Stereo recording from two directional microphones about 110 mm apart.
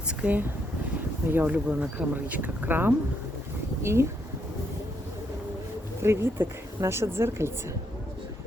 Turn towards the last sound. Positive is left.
turn(degrees=-25)  # may be behind; listen again after turning